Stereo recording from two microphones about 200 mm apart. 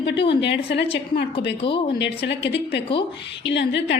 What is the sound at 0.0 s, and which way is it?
Speech, 60° left (ahead or behind).